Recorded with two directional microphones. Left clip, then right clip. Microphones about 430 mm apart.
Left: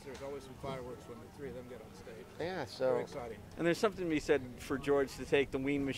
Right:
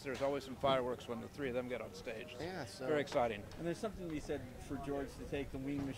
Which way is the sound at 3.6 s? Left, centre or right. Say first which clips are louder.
Left 11 dB; centre.